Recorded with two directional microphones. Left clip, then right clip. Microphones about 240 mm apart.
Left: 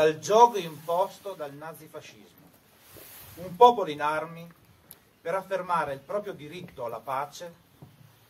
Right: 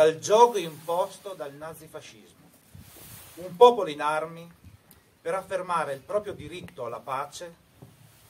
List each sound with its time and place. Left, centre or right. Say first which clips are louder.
0.0 s a man's voice: right 1 dB; right
3.5 s a man's voice: right 1 dB; right
5.2 s a man's voice: even; right